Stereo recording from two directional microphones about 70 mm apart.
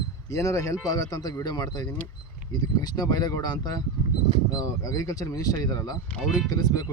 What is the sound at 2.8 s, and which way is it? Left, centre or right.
Speech, left.